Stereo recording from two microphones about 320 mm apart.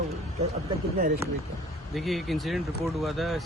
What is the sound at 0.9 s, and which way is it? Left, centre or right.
Speech, right.